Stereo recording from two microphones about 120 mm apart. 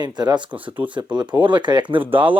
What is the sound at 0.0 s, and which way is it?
Speech, 35° right (ahead or behind).